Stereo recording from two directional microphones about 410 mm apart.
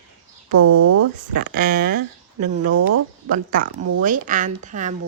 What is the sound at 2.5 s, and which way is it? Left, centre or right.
Speech, right.